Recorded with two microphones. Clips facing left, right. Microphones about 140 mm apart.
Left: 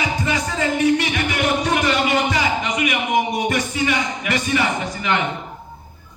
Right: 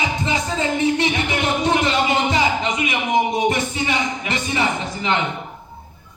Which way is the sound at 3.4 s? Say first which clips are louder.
Even; 25° right (ahead or behind).